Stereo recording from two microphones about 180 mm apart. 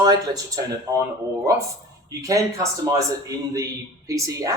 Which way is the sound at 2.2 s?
20° right (ahead or behind).